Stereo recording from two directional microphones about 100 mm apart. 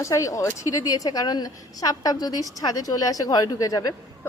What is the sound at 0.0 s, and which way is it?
A woman's voice, 30° left (ahead or behind).